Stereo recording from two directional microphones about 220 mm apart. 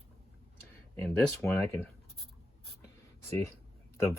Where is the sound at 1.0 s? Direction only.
10° left (ahead or behind).